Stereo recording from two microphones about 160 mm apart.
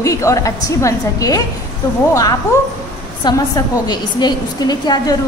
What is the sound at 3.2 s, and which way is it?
A woman's voice, 25° left (ahead or behind).